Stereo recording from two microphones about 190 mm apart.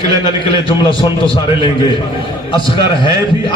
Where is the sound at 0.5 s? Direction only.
25° left (ahead or behind).